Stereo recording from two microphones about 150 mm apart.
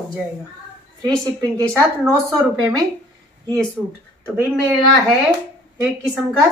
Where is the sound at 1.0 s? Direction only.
25° right (ahead or behind).